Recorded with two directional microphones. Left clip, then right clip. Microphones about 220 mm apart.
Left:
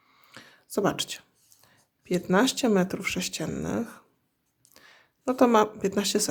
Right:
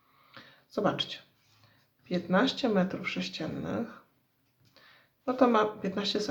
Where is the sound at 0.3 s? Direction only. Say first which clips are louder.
Left 4 dB; 45° left (ahead or behind).